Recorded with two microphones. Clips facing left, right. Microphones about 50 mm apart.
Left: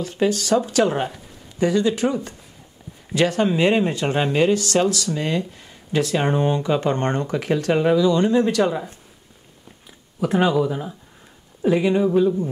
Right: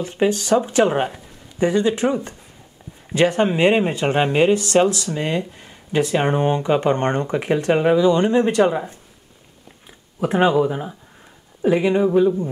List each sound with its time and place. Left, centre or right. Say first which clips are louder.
0.0 s speech: right 1 dB; right
3.2 s speech: right 2 dB; right